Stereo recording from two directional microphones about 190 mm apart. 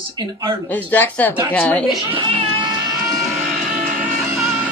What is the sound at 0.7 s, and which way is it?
Speech, 10° left (ahead or behind).